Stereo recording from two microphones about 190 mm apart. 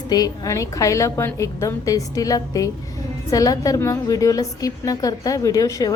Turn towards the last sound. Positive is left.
turn(degrees=15)  # may be behind; listen again after turning